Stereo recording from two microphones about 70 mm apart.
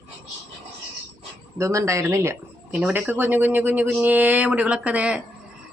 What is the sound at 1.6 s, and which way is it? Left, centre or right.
Speech, right.